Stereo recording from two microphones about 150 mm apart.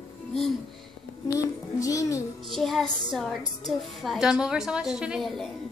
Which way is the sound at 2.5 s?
Centre (ahead or behind).